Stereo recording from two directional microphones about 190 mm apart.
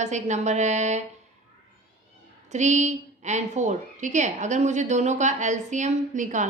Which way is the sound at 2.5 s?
40° right (ahead or behind).